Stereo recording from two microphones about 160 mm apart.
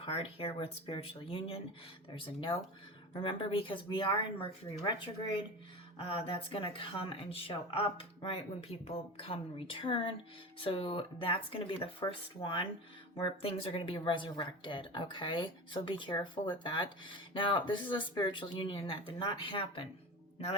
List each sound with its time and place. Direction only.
0.0 s speech: 35° left (ahead or behind)